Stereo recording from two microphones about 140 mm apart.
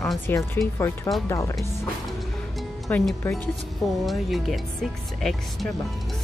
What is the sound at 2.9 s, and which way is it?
Speech, 10° left (ahead or behind).